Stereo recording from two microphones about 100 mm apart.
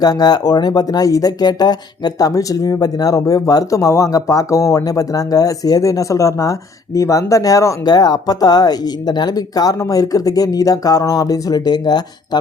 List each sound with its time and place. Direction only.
0.0 s speech: 40° left (ahead or behind)